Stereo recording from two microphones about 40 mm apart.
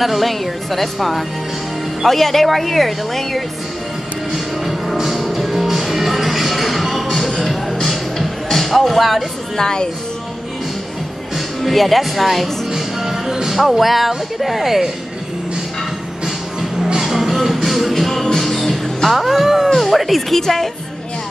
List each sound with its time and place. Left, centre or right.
0.0 s speech: centre
4.3 s music: centre
9.6 s speech: centre
11.3 s music: centre
13.6 s speech: centre
16.7 s music: centre
17.0 s music: centre
19.8 s speech: centre